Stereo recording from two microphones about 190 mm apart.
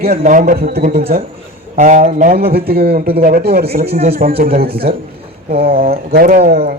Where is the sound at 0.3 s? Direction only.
45° right (ahead or behind).